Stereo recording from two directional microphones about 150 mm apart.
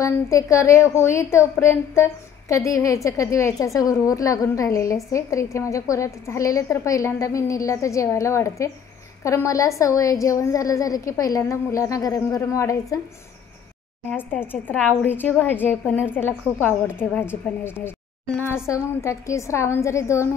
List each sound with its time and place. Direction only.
0.0 s a woman's voice: 20° left (ahead or behind)
14.1 s a woman's voice: 15° left (ahead or behind)